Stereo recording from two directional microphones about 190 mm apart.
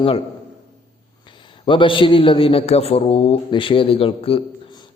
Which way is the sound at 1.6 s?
25° left (ahead or behind).